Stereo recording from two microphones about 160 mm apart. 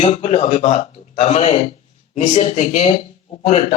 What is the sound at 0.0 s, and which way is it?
A man's voice, 40° left (ahead or behind).